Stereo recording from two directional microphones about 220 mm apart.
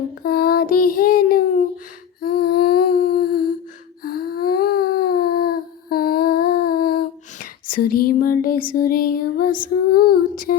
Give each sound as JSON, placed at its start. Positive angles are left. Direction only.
{"t": 0.2, "sound": "child singing", "side_deg": 45}
{"t": 2.2, "sound": "humming", "side_deg": 45}
{"t": 4.0, "sound": "a sound", "side_deg": 45}